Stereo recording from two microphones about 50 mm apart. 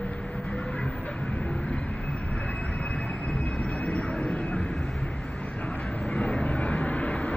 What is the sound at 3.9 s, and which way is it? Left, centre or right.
Vehicle, left.